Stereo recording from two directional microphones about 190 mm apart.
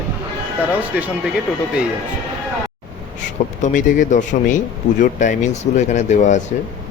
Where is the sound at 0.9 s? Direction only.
10° right (ahead or behind).